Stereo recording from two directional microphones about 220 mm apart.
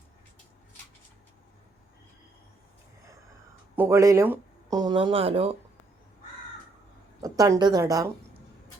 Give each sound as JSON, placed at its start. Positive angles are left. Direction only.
{"t": 3.8, "sound": "speech", "side_deg": -10}
{"t": 7.2, "sound": "a woman's voice", "side_deg": -15}